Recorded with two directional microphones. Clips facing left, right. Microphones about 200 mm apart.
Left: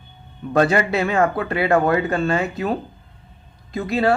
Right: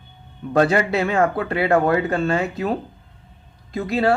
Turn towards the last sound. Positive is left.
turn(degrees=-35)  # may be behind; listen again after turning